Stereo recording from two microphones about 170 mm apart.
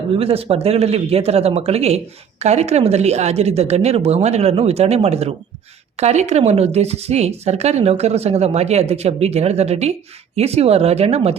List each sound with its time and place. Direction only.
0.2 s speech: 35° right (ahead or behind)